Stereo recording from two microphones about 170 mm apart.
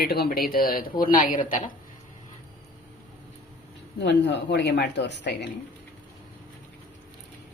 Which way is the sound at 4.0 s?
90° left.